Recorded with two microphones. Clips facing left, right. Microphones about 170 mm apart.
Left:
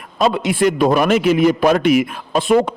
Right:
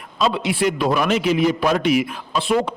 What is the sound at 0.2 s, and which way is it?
A man's voice, 50° left (ahead or behind).